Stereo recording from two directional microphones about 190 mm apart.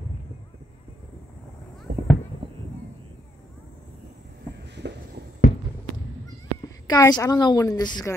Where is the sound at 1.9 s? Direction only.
45° right (ahead or behind).